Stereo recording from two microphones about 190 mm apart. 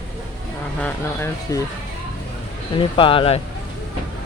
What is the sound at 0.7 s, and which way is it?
Speech, 10° left (ahead or behind).